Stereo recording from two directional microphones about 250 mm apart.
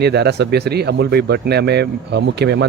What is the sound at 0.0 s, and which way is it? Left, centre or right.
A man's voice, right.